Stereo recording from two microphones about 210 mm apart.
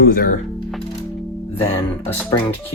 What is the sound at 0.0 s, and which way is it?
Speech, 45° left (ahead or behind).